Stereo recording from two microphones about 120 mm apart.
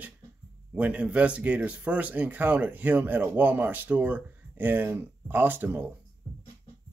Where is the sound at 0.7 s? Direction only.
10° right (ahead or behind).